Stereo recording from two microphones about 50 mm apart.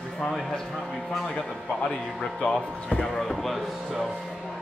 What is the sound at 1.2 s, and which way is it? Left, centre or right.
Speech, centre.